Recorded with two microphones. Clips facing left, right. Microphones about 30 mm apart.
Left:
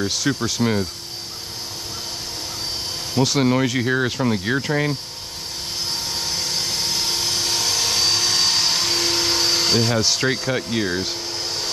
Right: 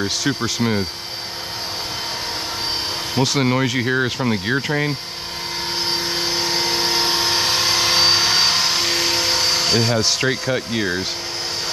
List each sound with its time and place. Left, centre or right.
0.0 s speech: centre
3.4 s speech: centre
5.9 s vehicle: right
9.3 s speech: centre